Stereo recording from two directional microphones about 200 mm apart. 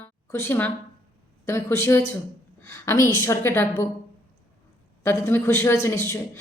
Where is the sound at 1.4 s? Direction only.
15° left (ahead or behind).